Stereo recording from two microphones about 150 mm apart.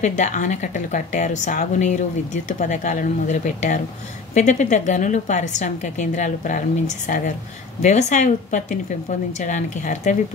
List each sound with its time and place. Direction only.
0.0 s a woman's voice: 55° left (ahead or behind)